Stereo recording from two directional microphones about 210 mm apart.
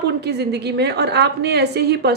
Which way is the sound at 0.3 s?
50° right (ahead or behind).